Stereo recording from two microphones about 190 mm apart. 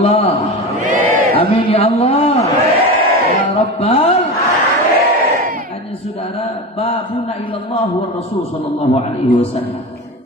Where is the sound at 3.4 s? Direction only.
35° left (ahead or behind).